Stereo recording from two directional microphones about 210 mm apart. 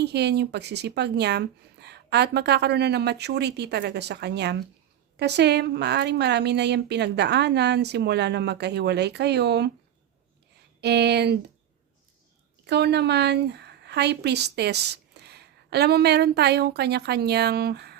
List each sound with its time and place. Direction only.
0.0 s a woman's voice: 50° right (ahead or behind)
10.8 s speech: 50° right (ahead or behind)
12.6 s a woman's voice: 55° right (ahead or behind)